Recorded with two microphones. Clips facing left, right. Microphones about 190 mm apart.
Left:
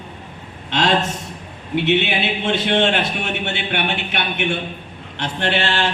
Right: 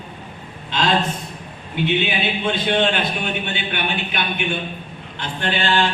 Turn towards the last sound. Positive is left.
turn(degrees=75)  # may be behind; listen again after turning